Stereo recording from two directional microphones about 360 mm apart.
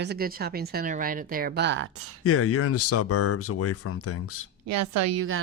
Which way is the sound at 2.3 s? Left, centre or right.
Left.